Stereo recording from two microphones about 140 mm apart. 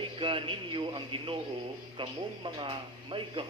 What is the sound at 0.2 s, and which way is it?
A man's voice, 35° right (ahead or behind).